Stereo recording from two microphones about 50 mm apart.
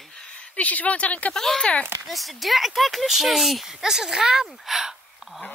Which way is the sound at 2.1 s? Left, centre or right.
Centre.